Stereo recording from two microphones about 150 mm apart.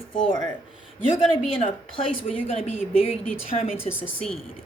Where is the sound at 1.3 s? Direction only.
40° left (ahead or behind).